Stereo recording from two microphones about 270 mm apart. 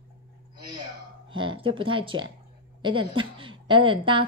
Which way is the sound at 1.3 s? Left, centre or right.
Centre.